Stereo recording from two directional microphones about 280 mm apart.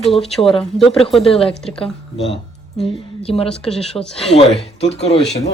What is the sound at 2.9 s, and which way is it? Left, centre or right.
Speech, left.